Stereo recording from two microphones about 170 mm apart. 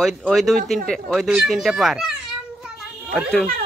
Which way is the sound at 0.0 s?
Centre (ahead or behind).